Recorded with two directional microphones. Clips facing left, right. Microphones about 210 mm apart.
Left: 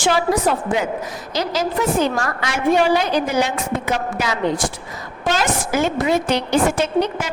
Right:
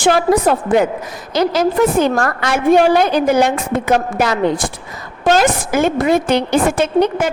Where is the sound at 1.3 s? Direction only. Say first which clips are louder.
Right 7 dB; 55° right (ahead or behind).